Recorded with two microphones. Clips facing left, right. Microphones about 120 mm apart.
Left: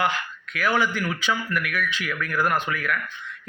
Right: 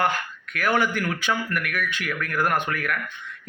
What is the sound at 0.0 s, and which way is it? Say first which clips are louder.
A man's voice: right 1 dB; 50° right (ahead or behind).